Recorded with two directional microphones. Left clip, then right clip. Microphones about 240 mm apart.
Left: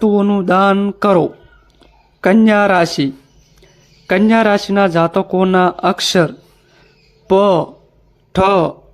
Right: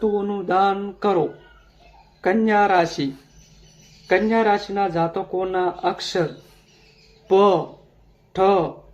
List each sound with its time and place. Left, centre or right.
0.0 s speech: left
7.3 s speech: left